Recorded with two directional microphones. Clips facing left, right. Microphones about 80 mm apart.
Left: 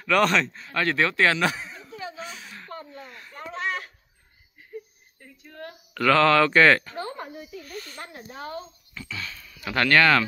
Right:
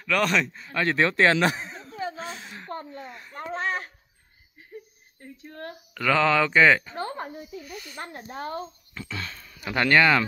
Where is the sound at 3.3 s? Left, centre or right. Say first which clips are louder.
Right 1 dB; right.